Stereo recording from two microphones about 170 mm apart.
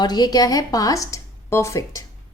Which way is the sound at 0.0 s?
25° left (ahead or behind).